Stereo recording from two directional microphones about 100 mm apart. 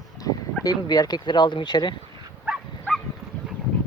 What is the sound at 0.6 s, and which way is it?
Speech, 40° left (ahead or behind).